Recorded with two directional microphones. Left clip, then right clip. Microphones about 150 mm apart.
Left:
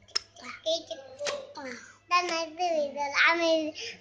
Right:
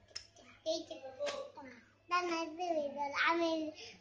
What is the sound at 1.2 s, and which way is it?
Hands, 90° left.